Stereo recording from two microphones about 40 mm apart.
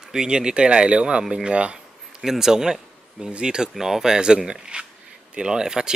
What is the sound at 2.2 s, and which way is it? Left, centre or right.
Speech, centre.